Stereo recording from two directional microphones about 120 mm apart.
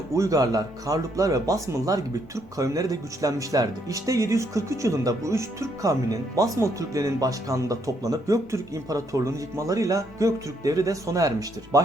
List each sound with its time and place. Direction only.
0.2 s speech: 30° right (ahead or behind)